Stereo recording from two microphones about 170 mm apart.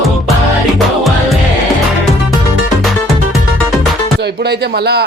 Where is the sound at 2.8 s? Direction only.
Centre (ahead or behind).